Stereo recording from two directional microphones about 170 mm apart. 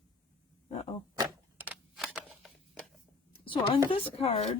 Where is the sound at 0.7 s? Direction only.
35° left (ahead or behind).